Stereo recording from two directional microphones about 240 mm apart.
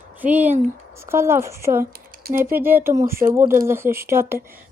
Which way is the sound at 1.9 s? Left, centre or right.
Right.